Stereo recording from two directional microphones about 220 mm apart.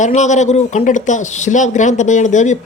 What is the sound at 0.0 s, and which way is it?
Speech, 35° left (ahead or behind).